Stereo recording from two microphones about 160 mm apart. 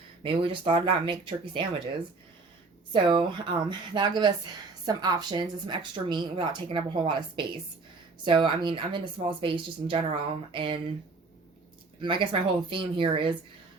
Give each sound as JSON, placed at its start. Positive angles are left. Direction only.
{"t": 0.2, "sound": "speech", "side_deg": -30}
{"t": 2.9, "sound": "a woman's voice", "side_deg": -30}
{"t": 12.0, "sound": "speech", "side_deg": -30}